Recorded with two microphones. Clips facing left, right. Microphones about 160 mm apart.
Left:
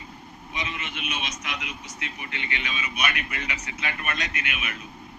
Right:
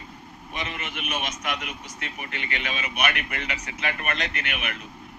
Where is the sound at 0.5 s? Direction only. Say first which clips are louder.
Right 1 dB; 50° right (ahead or behind).